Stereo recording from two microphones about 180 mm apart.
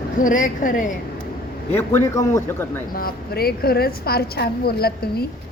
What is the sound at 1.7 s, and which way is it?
Speech, 15° left (ahead or behind).